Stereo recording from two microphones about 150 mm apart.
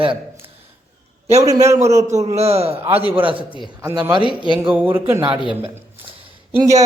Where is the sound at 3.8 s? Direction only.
20° right (ahead or behind).